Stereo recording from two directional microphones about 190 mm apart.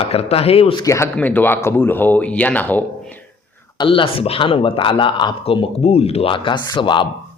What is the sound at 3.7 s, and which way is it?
Speech, 25° left (ahead or behind).